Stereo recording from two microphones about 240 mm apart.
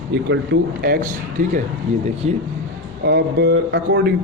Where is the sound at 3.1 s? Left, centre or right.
Right.